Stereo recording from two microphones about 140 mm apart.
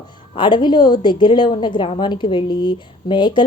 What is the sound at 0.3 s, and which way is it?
A woman's voice, 35° left (ahead or behind).